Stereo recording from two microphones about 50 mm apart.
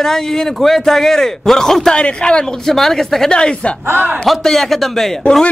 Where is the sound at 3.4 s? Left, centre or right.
Centre.